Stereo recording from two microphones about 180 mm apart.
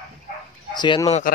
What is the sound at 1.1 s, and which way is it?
Speech, 45° left (ahead or behind).